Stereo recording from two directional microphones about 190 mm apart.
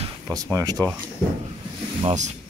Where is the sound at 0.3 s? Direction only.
15° right (ahead or behind).